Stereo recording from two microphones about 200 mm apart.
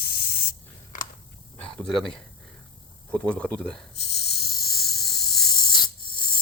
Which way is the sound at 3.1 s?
5° left (ahead or behind).